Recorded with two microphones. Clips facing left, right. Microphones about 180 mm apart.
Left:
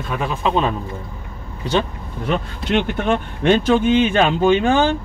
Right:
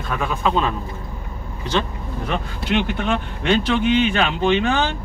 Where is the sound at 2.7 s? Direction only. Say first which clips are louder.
Left 2 dB; 45° left (ahead or behind).